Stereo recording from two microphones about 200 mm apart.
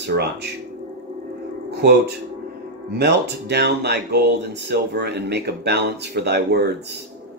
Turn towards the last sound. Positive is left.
turn(degrees=-55)  # may be behind; listen again after turning